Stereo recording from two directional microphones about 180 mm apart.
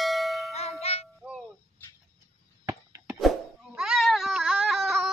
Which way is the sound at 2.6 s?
15° right (ahead or behind).